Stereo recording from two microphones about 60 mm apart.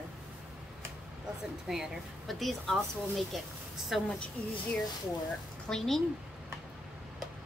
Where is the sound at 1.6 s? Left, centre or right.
Centre.